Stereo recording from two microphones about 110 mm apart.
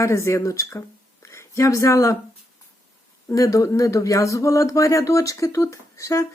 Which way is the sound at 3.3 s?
30° left (ahead or behind).